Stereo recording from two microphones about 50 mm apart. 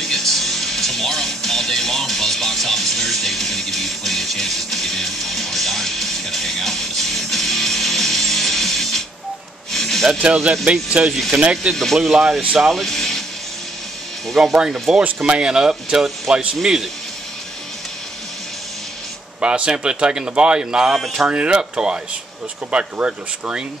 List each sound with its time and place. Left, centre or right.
0.0 s music: centre
9.7 s gasp: centre
10.6 s speech: right
11.7 s speech: centre
14.3 s speech: centre
19.4 s speech: right
20.9 s speech: centre
21.3 s speech: right